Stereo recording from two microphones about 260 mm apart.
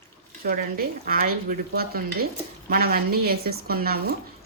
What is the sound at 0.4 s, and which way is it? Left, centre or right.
Speech, right.